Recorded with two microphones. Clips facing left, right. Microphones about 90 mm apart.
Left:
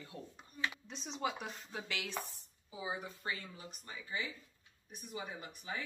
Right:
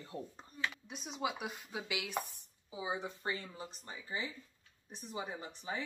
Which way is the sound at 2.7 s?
20° right (ahead or behind).